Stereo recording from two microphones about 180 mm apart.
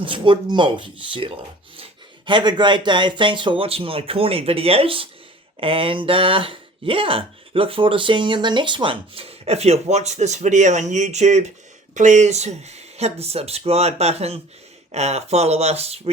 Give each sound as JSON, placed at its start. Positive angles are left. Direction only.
{"t": 0.0, "sound": "speech", "side_deg": -30}